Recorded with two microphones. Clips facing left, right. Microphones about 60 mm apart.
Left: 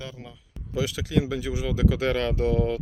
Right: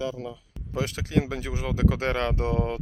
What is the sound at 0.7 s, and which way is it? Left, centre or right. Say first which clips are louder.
Speech: left 1 dB; right.